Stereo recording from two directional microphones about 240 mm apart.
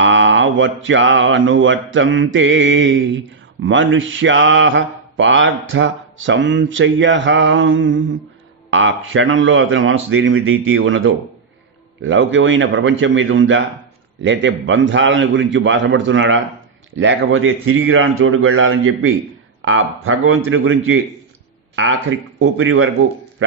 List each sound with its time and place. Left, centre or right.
0.0 s mantra: right
8.6 s speech: right
12.0 s mantra: right
16.9 s speech: right
22.4 s speech: right